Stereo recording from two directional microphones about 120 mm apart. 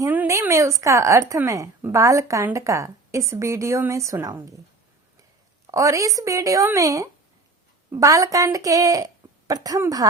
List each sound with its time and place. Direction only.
0.3 s a woman's voice: 25° right (ahead or behind)
5.7 s a woman's voice: 25° right (ahead or behind)